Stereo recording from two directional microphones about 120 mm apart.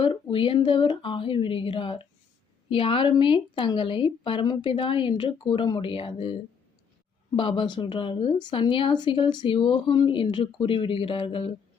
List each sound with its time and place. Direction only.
0.0 s speech: 45° left (ahead or behind)